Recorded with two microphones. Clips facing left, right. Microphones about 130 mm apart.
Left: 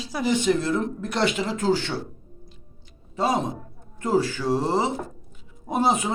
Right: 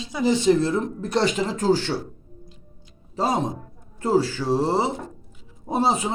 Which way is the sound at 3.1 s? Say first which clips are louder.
Even; 35° right (ahead or behind).